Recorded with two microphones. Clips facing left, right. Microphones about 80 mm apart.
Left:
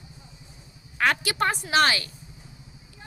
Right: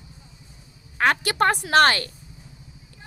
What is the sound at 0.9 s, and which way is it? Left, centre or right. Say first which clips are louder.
A woman's voice: right 3 dB; right.